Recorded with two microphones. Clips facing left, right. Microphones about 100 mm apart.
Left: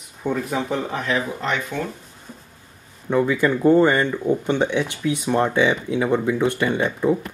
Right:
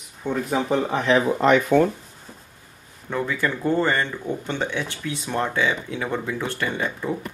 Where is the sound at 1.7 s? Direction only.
55° right (ahead or behind).